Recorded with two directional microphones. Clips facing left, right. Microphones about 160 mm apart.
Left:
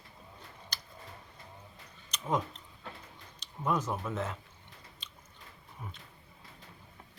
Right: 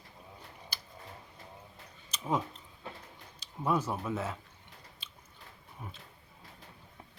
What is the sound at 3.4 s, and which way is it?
Speech, 10° right (ahead or behind).